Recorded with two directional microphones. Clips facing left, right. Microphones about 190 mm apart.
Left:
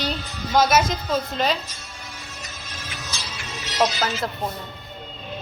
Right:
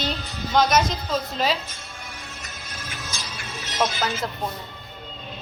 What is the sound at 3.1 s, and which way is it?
Music, 50° right (ahead or behind).